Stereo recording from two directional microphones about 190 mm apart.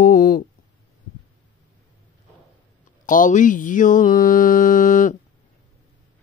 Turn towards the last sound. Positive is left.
turn(degrees=45)  # may be behind; listen again after turning